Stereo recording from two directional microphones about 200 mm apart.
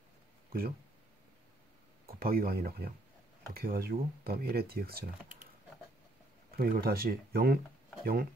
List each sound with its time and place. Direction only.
0.5 s speech: 50° right (ahead or behind)
2.0 s speech: 50° right (ahead or behind)
6.5 s speech: 50° right (ahead or behind)